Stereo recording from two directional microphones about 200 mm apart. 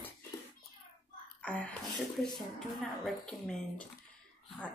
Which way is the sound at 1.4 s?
5° left (ahead or behind).